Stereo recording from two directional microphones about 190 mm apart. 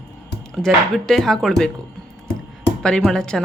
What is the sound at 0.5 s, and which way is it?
Speech, centre (ahead or behind).